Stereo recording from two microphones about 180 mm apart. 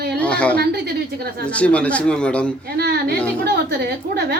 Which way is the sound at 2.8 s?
65° right (ahead or behind).